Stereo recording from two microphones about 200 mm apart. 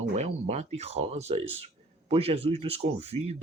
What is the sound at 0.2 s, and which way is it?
Speech, 35° right (ahead or behind).